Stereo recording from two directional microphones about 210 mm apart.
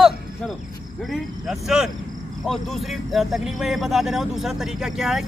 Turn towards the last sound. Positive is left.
turn(degrees=0)  # may be behind; listen again after turning